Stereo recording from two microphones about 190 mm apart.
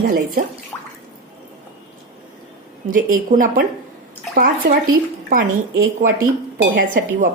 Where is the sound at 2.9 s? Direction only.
45° right (ahead or behind).